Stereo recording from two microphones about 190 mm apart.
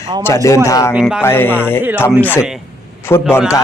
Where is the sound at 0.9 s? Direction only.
5° right (ahead or behind).